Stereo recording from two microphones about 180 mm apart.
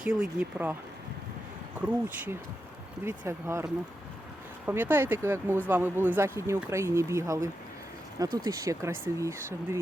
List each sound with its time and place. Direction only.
0.0 s speech: 5° right (ahead or behind)
1.8 s speech: 10° right (ahead or behind)